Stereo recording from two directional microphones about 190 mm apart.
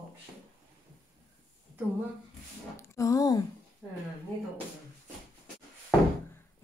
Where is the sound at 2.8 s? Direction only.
15° left (ahead or behind).